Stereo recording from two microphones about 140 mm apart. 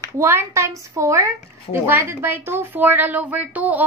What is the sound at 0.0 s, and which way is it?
A woman's voice, 20° right (ahead or behind).